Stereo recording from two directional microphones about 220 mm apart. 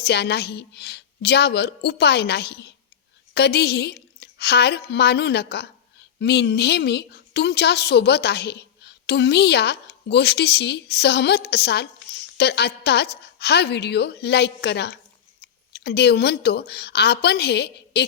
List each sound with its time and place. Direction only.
0.0 s a woman's voice: 50° left (ahead or behind)